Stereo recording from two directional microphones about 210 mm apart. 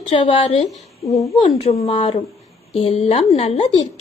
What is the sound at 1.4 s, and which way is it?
Speech, 30° left (ahead or behind).